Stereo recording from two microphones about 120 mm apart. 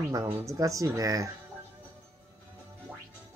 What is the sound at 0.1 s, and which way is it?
Speech, 30° right (ahead or behind).